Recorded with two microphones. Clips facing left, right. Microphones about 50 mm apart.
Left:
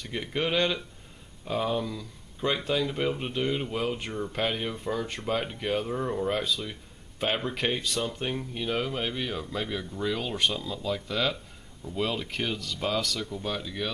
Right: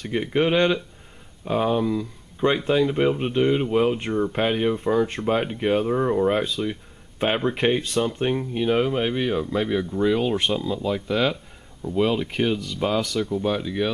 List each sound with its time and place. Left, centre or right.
0.1 s speech: right